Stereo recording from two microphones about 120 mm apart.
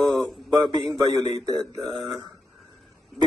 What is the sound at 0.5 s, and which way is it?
Speech, 35° right (ahead or behind).